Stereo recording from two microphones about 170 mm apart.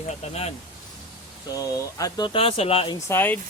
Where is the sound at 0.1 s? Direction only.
40° left (ahead or behind).